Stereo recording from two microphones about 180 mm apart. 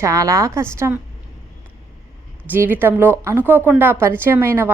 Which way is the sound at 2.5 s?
10° right (ahead or behind).